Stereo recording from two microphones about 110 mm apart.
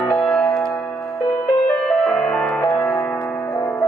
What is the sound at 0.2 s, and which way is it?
Music, 5° left (ahead or behind).